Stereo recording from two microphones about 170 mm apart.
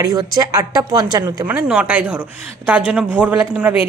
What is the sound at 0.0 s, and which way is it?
Speech, 20° right (ahead or behind).